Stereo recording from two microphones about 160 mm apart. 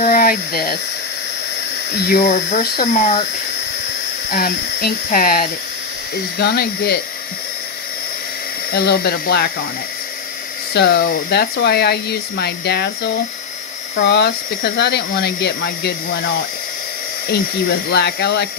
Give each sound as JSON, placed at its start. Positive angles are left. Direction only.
{"t": 0.0, "sound": "speech", "side_deg": 65}
{"t": 1.9, "sound": "speech", "side_deg": 80}
{"t": 2.9, "sound": "speech", "side_deg": 45}
{"t": 4.3, "sound": "speech", "side_deg": 70}
{"t": 6.4, "sound": "speech", "side_deg": 80}
{"t": 8.7, "sound": "speech", "side_deg": 80}
{"t": 10.8, "sound": "speech", "side_deg": 85}
{"t": 14.1, "sound": "speech", "side_deg": 90}
{"t": 17.2, "sound": "speech", "side_deg": 80}